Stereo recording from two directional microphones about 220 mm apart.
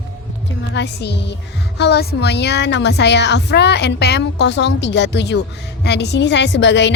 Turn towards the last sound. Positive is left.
turn(degrees=55)  # may be behind; listen again after turning